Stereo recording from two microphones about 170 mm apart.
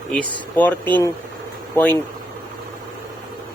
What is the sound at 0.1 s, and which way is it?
Speech, 10° left (ahead or behind).